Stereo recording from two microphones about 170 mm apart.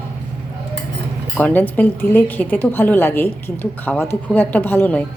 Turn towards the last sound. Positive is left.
turn(degrees=10)  # may be behind; listen again after turning